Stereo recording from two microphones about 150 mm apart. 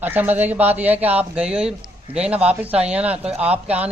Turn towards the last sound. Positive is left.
turn(degrees=-10)  # may be behind; listen again after turning